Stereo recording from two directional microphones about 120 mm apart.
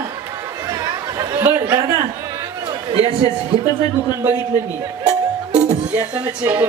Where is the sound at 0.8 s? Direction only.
30° right (ahead or behind).